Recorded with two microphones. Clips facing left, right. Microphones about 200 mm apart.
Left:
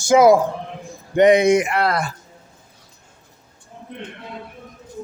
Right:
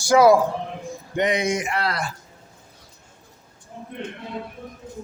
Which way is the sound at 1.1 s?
60° left (ahead or behind).